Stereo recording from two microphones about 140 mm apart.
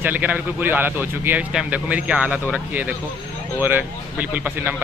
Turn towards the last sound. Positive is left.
turn(degrees=-15)  # may be behind; listen again after turning